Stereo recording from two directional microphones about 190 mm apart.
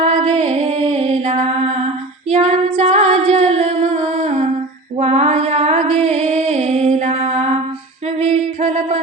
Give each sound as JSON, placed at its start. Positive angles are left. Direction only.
{"t": 0.0, "sound": "music", "side_deg": -30}
{"t": 2.3, "sound": "female singing", "side_deg": -35}
{"t": 4.9, "sound": "a sound", "side_deg": -35}
{"t": 8.6, "sound": "music", "side_deg": -35}